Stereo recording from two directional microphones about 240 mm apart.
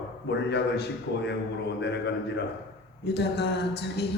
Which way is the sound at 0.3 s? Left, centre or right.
Left.